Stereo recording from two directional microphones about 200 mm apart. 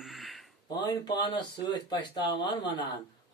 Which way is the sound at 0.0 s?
Centre (ahead or behind).